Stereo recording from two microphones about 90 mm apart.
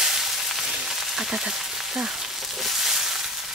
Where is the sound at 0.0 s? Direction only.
5° right (ahead or behind).